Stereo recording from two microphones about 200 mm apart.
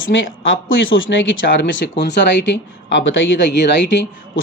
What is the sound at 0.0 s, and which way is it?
Speech, 75° left (ahead or behind).